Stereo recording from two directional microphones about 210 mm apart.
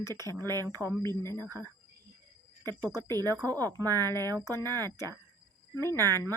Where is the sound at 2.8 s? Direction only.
15° right (ahead or behind).